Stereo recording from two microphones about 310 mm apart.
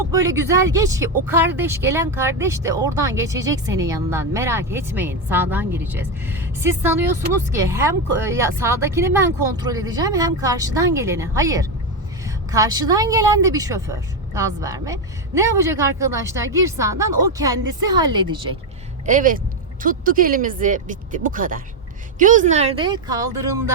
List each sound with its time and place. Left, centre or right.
0.1 s speech: centre